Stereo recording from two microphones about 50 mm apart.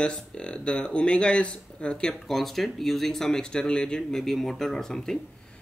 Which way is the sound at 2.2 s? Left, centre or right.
Centre.